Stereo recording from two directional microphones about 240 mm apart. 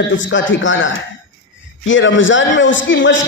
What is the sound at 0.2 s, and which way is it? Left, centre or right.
A man's voice, left.